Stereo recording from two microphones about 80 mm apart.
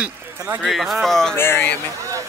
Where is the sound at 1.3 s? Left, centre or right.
Left.